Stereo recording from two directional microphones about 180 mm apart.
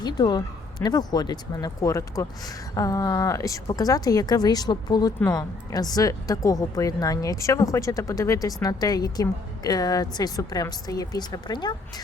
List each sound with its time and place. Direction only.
0.0 s speech: 20° left (ahead or behind)